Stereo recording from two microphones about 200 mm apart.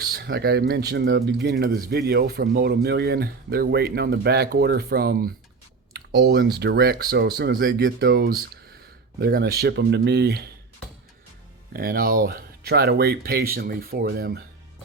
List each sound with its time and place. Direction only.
0.1 s speech: 55° right (ahead or behind)
11.7 s speech: 50° right (ahead or behind)